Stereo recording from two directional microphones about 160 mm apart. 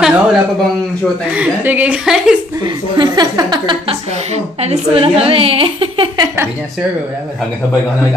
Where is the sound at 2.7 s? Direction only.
25° right (ahead or behind).